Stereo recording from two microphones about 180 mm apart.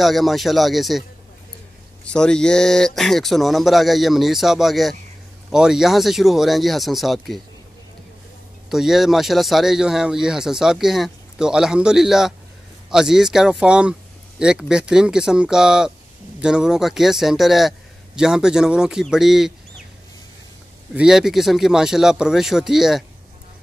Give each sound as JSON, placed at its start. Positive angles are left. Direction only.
{"t": 0.0, "sound": "speech", "side_deg": 0}
{"t": 2.0, "sound": "speech", "side_deg": 5}
{"t": 8.6, "sound": "speech", "side_deg": 0}
{"t": 20.9, "sound": "speech", "side_deg": -5}